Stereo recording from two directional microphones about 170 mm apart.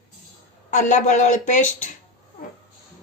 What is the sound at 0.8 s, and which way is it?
A woman's voice, 50° left (ahead or behind).